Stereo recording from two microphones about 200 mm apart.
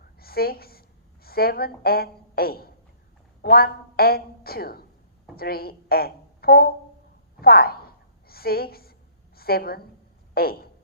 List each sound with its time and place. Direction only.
0.2 s a woman's voice: 50° left (ahead or behind)
7.4 s a sound: 50° left (ahead or behind)
10.3 s a woman's voice: 50° left (ahead or behind)